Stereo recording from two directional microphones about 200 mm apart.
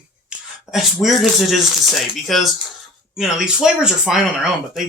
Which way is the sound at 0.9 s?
Centre (ahead or behind).